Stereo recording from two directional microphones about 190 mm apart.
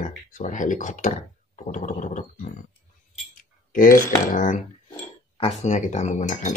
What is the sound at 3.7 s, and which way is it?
Speech, 45° left (ahead or behind).